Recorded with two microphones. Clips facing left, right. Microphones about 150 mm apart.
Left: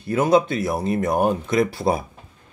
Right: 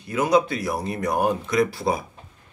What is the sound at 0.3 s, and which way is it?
Speech, 25° left (ahead or behind).